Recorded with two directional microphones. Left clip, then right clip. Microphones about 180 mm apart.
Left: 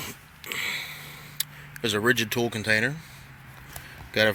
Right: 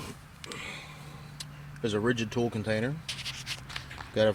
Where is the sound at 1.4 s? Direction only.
10° left (ahead or behind).